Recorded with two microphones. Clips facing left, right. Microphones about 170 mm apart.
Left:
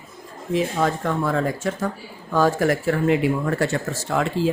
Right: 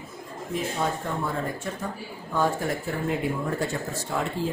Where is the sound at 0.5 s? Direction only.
90° left.